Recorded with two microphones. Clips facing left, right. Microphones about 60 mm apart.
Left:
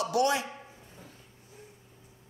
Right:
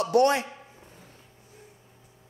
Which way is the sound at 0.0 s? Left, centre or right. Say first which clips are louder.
Right 5 dB; right.